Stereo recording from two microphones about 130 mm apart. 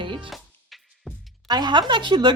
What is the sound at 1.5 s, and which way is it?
Speech, 35° right (ahead or behind).